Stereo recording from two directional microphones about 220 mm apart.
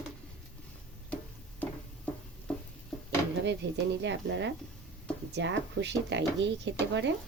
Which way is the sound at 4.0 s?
55° right (ahead or behind).